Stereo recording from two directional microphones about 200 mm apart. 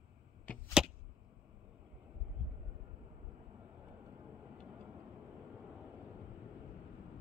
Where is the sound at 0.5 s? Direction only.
5° left (ahead or behind).